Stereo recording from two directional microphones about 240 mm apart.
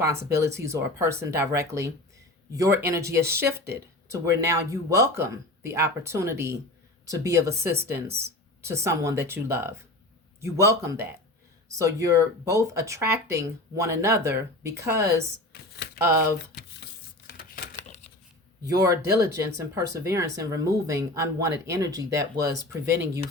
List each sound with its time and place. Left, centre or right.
0.0 s speech: centre
15.5 s speech: left
17.2 s a sound: left
18.7 s speech: centre